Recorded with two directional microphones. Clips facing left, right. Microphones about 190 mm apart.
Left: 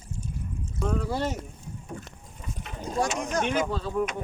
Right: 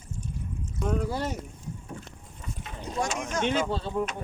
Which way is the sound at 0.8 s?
25° left (ahead or behind).